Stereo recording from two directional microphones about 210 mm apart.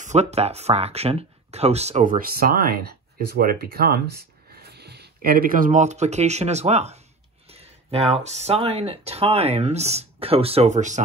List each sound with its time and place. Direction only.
0.0 s speech: 30° right (ahead or behind)